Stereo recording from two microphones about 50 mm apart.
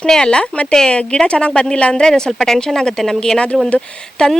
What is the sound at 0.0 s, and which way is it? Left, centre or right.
Speech, centre.